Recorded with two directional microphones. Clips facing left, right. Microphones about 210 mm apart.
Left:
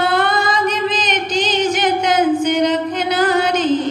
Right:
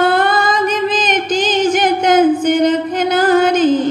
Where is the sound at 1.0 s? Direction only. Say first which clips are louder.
Right 3 dB; 50° right (ahead or behind).